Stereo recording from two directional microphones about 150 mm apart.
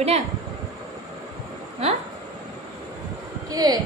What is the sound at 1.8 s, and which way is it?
Speech, 40° right (ahead or behind).